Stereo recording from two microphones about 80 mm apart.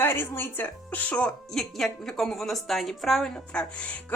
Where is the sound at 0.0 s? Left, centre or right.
Left.